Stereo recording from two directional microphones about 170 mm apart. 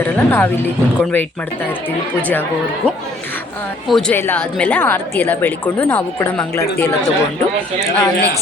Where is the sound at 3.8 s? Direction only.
Centre (ahead or behind).